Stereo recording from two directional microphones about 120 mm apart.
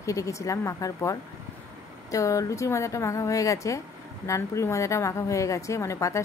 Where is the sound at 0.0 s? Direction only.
25° left (ahead or behind).